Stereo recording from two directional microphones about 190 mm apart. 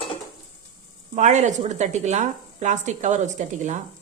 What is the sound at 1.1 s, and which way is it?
Speech, 40° right (ahead or behind).